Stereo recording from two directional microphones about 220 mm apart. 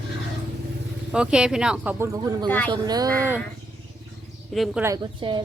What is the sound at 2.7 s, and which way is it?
Speech, 15° right (ahead or behind).